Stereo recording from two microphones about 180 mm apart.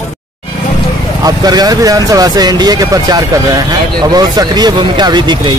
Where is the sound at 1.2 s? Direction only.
20° right (ahead or behind).